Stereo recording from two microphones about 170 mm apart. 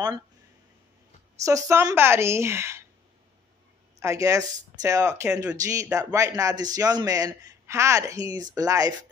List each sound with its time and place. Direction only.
1.4 s a woman's voice: 20° right (ahead or behind)
4.0 s a man's voice: 20° right (ahead or behind)
5.3 s a woman's voice: 5° right (ahead or behind)
6.1 s a man's voice: 20° right (ahead or behind)